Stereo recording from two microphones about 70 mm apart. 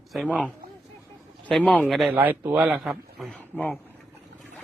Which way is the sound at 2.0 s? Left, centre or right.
Right.